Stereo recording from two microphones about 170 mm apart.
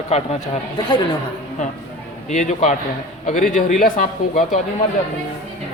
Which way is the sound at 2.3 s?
45° left (ahead or behind).